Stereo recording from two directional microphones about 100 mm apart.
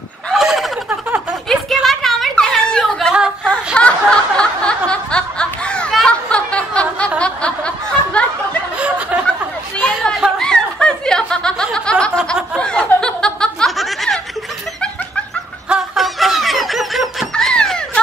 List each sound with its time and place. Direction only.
0.3 s a sound: centre (ahead or behind)
7.2 s snicker: 10° left (ahead or behind)
8.7 s a sound: 15° right (ahead or behind)
9.8 s chatter: 15° left (ahead or behind)
10.4 s snicker: 10° left (ahead or behind)
15.7 s snicker: 5° right (ahead or behind)